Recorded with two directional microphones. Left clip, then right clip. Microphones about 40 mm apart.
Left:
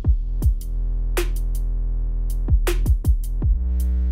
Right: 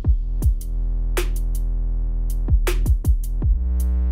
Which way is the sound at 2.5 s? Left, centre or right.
Centre.